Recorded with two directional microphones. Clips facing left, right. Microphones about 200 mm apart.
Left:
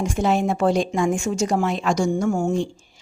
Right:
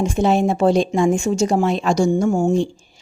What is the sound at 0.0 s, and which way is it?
A woman's voice, 25° right (ahead or behind).